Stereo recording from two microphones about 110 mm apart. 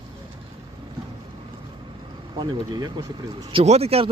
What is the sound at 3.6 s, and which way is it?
Speech, 75° right (ahead or behind).